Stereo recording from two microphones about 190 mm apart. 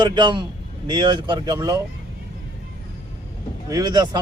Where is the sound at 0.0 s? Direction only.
25° right (ahead or behind).